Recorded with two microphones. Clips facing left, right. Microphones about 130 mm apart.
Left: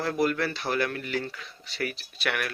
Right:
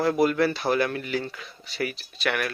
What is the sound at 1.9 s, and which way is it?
Speech, centre (ahead or behind).